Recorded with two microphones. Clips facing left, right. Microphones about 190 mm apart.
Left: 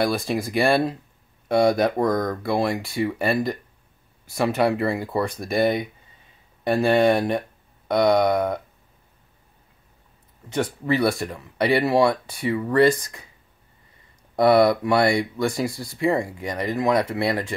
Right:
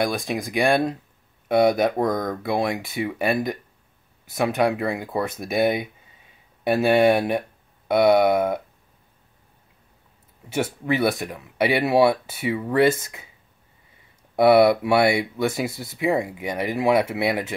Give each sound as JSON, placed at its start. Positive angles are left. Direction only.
{"t": 0.0, "sound": "speech", "side_deg": 0}
{"t": 10.5, "sound": "speech", "side_deg": -5}
{"t": 14.3, "sound": "speech", "side_deg": -5}